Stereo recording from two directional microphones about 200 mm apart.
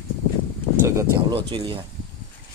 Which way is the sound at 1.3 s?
25° right (ahead or behind).